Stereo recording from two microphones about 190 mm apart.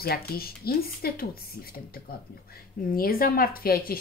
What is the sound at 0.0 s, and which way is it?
Speech, 55° left (ahead or behind).